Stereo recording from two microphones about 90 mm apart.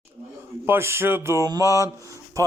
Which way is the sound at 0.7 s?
30° right (ahead or behind).